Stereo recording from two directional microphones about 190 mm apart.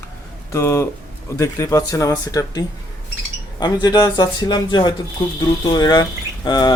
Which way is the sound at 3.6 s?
20° left (ahead or behind).